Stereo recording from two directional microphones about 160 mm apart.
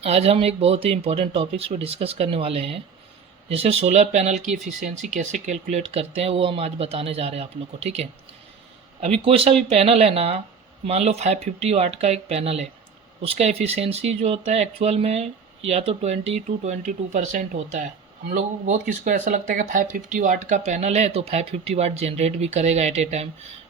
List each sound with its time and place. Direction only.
0.0 s speech: 40° right (ahead or behind)